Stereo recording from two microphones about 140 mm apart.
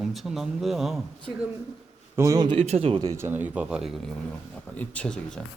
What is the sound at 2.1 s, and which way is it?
Speech, 25° right (ahead or behind).